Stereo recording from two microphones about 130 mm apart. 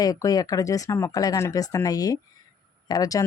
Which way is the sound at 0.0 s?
25° left (ahead or behind).